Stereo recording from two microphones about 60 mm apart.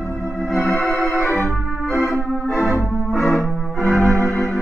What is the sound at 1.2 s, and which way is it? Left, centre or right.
Organ, left.